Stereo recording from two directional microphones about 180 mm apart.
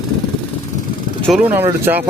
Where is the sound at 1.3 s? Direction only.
10° right (ahead or behind).